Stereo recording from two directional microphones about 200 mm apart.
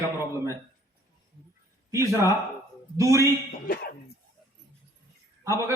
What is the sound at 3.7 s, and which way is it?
Speech, 45° left (ahead or behind).